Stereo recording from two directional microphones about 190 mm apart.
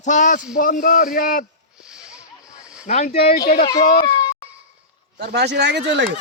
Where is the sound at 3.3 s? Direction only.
55° left (ahead or behind).